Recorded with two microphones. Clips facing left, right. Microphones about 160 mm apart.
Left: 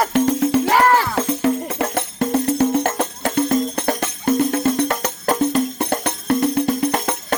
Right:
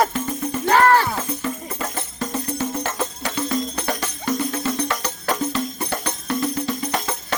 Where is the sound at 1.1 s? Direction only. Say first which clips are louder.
Left 8 dB; 70° left (ahead or behind).